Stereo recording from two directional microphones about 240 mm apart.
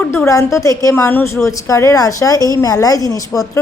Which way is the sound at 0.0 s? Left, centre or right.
Centre.